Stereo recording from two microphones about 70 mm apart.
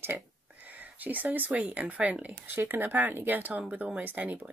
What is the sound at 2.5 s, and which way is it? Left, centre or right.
Speech, right.